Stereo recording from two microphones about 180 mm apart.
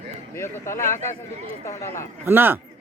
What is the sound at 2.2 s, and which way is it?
Speech, 10° right (ahead or behind).